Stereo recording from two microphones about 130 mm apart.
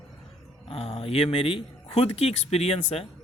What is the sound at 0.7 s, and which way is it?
Speech, 45° left (ahead or behind).